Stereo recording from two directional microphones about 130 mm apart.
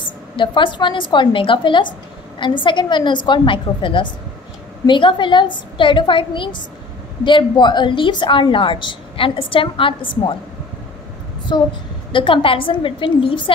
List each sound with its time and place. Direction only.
0.4 s a woman's voice: 40° left (ahead or behind)
11.5 s a woman's voice: 35° left (ahead or behind)